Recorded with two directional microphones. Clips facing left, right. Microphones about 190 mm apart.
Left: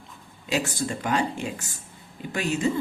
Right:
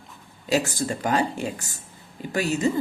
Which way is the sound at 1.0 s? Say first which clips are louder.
Right 2 dB; 40° right (ahead or behind).